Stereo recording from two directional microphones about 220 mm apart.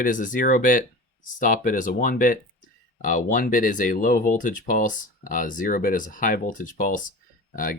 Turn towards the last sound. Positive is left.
turn(degrees=40)  # may be behind; listen again after turning